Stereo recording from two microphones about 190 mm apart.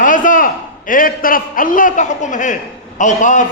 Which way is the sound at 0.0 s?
45° left (ahead or behind).